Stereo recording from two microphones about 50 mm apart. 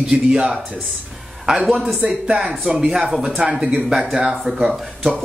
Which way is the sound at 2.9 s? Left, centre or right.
Centre.